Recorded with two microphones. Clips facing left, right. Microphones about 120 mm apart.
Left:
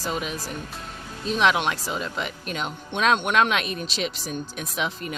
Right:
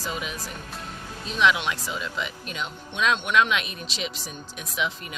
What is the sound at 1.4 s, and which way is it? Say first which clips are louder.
Speech: left 1 dB; 45° left (ahead or behind).